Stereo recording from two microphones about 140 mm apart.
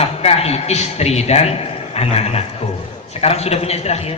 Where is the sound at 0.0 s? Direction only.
45° left (ahead or behind).